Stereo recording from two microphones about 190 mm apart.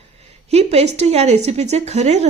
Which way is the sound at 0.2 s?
35° right (ahead or behind).